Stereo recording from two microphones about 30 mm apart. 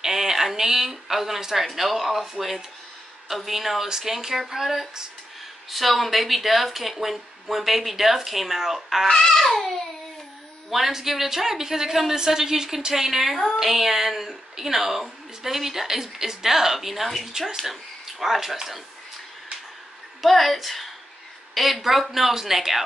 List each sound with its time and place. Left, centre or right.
0.0 s a woman's voice: centre
9.3 s babbling: centre
10.7 s speech: centre
17.4 s speech: centre
18.2 s speech: centre
20.2 s a woman's voice: centre